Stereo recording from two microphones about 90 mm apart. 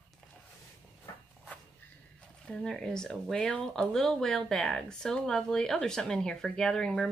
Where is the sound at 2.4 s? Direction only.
5° left (ahead or behind).